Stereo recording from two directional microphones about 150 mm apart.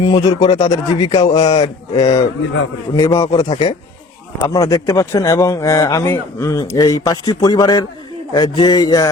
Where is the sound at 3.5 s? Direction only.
45° left (ahead or behind).